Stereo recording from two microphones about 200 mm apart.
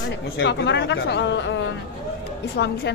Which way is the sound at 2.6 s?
55° left (ahead or behind).